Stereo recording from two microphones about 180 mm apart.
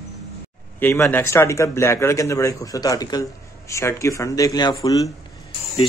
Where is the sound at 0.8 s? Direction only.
10° left (ahead or behind).